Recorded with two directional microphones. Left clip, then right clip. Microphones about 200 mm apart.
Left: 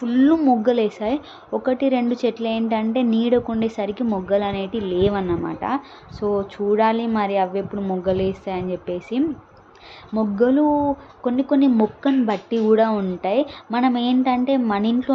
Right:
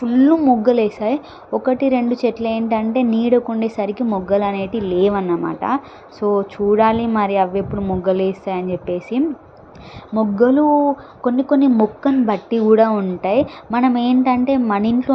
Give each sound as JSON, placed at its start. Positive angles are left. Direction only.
{"t": 0.0, "sound": "a woman's voice", "side_deg": -10}